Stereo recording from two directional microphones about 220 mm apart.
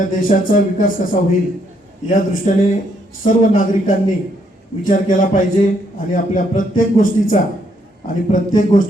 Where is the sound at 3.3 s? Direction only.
40° left (ahead or behind).